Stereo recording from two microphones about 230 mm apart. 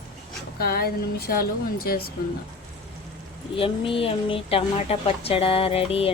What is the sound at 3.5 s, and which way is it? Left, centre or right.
A woman's voice, left.